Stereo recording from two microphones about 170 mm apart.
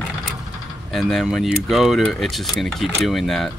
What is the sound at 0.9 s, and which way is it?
Speech, centre (ahead or behind).